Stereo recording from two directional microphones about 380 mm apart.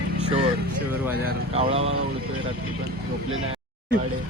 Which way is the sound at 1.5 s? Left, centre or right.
Centre.